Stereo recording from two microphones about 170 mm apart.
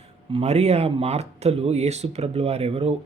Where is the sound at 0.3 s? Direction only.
40° right (ahead or behind).